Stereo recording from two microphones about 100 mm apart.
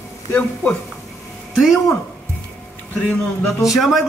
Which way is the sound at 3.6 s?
Centre (ahead or behind).